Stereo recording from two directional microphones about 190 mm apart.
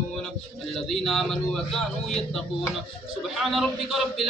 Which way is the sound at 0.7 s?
Centre (ahead or behind).